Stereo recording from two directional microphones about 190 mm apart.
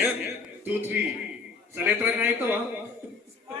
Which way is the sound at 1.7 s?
10° right (ahead or behind).